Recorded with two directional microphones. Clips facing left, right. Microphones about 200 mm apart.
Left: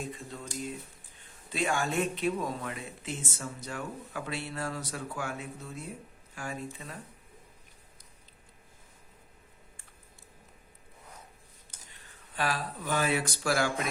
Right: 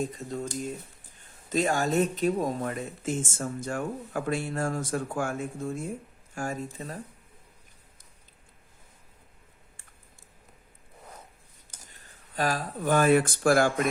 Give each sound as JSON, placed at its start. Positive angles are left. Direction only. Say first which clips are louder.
{"t": 0.0, "sound": "speech", "louder": "right 8 dB", "side_deg": -40}
{"t": 11.9, "sound": "speech", "louder": "even", "side_deg": -40}